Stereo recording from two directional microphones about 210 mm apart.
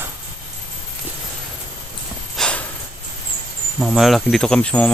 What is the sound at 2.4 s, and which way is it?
Snort, 5° left (ahead or behind).